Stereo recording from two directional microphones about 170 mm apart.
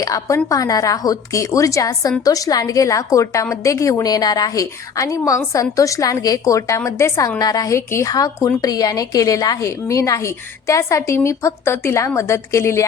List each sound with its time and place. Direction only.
0.0 s a woman's voice: 20° left (ahead or behind)